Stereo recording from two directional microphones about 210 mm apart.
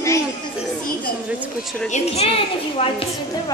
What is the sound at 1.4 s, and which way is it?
Speech, centre (ahead or behind).